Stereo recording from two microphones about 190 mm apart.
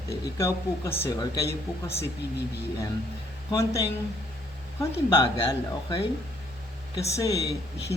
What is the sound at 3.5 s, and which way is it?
Speech, 15° left (ahead or behind).